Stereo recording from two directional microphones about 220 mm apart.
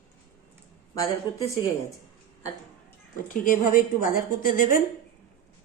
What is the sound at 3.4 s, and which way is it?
A woman's voice, 40° left (ahead or behind).